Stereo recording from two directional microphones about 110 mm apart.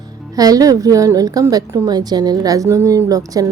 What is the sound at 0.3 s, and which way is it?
A woman's voice, 35° right (ahead or behind).